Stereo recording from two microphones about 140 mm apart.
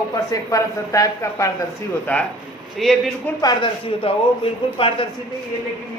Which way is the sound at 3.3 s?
30° left (ahead or behind).